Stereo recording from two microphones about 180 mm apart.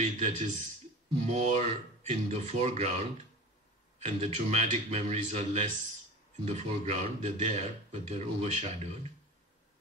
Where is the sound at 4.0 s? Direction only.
40° right (ahead or behind).